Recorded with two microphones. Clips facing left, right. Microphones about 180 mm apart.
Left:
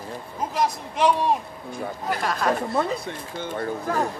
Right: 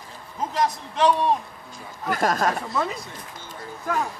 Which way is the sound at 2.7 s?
60° left (ahead or behind).